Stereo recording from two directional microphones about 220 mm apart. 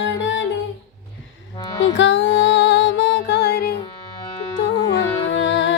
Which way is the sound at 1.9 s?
55° left (ahead or behind).